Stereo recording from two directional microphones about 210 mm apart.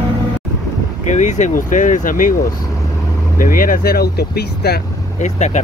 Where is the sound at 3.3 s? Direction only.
40° left (ahead or behind).